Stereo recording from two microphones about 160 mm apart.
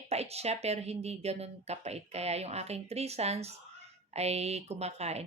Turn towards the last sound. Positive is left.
turn(degrees=-40)  # may be behind; listen again after turning